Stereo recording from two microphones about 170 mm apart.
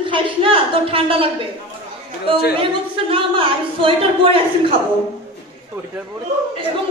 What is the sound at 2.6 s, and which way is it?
Speech, 30° right (ahead or behind).